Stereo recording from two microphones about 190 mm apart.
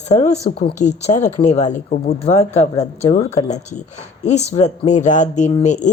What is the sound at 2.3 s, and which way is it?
Speech, 35° left (ahead or behind).